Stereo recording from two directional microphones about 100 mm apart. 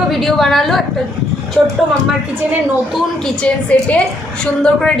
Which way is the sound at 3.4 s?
10° left (ahead or behind).